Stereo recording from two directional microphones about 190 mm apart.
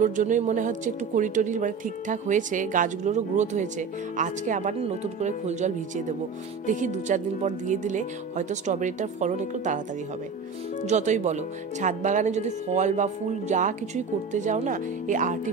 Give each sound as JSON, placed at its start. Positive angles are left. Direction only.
{"t": 0.0, "sound": "speech", "side_deg": -40}
{"t": 10.9, "sound": "speech", "side_deg": -40}